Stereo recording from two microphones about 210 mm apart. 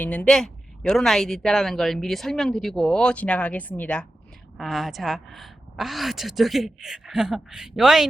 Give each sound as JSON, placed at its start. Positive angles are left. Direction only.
{"t": 0.0, "sound": "speech", "side_deg": 5}